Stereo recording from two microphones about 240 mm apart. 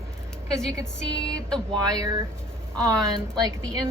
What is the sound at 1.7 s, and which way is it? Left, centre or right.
Speech, centre.